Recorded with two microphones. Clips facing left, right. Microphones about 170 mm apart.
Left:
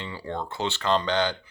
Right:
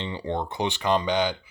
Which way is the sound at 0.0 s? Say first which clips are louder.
Right 4 dB; 20° right (ahead or behind).